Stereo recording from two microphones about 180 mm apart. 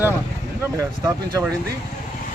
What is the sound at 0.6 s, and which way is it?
Speech, 15° right (ahead or behind).